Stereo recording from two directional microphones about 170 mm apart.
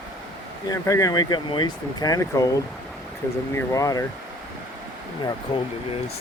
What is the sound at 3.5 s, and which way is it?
Speech, 20° left (ahead or behind).